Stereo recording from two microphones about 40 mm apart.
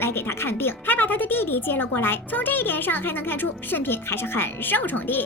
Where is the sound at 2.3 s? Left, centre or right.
Left.